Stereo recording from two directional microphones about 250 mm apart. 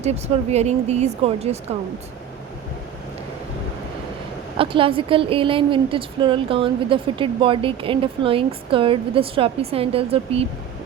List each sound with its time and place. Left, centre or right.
0.0 s a woman's voice: right
4.5 s a woman's voice: right